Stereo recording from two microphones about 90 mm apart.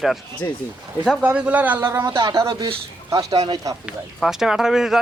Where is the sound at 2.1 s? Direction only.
45° right (ahead or behind).